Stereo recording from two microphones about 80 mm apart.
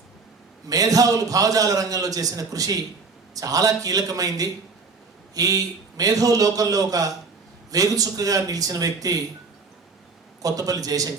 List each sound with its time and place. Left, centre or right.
0.7 s a man's voice: right
10.4 s a man's voice: right